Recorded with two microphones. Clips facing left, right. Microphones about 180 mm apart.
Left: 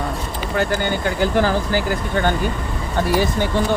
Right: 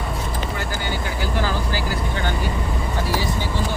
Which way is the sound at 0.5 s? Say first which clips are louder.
Left 7 dB; 60° left (ahead or behind).